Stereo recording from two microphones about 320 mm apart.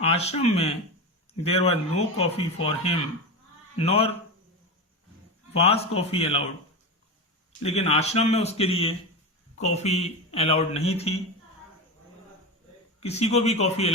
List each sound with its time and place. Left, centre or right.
0.0 s a man's voice: centre
5.5 s a man's voice: centre
7.6 s a man's voice: centre
13.0 s a man's voice: centre